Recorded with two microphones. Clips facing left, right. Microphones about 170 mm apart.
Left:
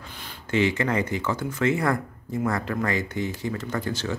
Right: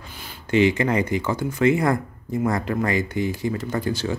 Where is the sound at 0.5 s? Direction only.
15° right (ahead or behind).